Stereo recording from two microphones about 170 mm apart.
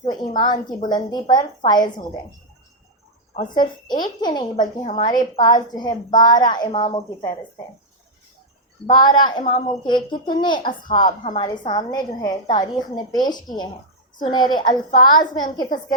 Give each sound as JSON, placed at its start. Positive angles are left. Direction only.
{"t": 0.0, "sound": "a woman's voice", "side_deg": 25}
{"t": 3.5, "sound": "a woman's voice", "side_deg": 25}
{"t": 4.9, "sound": "a woman's voice", "side_deg": 35}
{"t": 5.1, "sound": "a woman's voice", "side_deg": 25}
{"t": 8.9, "sound": "a woman's voice", "side_deg": 25}
{"t": 14.7, "sound": "a woman's voice", "side_deg": 55}
{"t": 15.5, "sound": "a woman's voice", "side_deg": 25}